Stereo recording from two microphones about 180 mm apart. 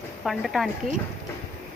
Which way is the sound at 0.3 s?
Centre (ahead or behind).